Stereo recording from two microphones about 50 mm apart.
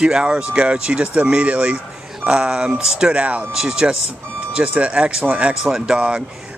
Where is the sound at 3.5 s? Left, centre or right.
Centre.